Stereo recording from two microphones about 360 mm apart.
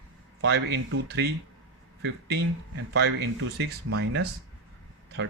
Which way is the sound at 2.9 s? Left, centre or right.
Right.